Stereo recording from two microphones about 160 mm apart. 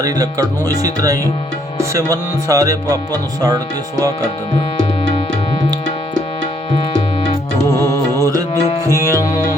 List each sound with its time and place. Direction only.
0.0 s speech: 20° right (ahead or behind)
7.7 s mantra: 20° left (ahead or behind)
8.1 s music: 20° right (ahead or behind)